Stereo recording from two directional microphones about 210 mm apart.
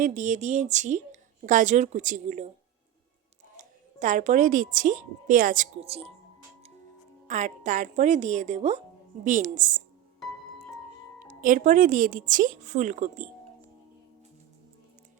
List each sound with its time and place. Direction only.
0.0 s a woman's voice: 40° right (ahead or behind)
3.6 s a woman's voice: 35° right (ahead or behind)
7.3 s a woman's voice: 35° right (ahead or behind)
11.2 s a woman's voice: 40° right (ahead or behind)